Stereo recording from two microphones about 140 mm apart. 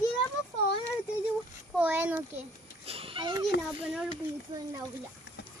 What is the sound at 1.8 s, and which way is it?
Speech, 10° right (ahead or behind).